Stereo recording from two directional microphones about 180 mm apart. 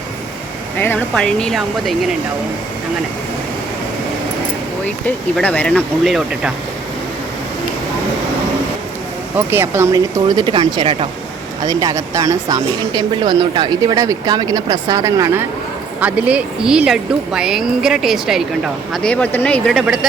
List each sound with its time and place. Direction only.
0.8 s speech: 10° left (ahead or behind)
5.0 s speech: 10° left (ahead or behind)
9.5 s speech: 10° right (ahead or behind)
16.0 s speech: 5° right (ahead or behind)